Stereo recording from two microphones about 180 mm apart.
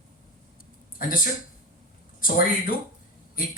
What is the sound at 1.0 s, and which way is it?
A man's voice, 50° left (ahead or behind).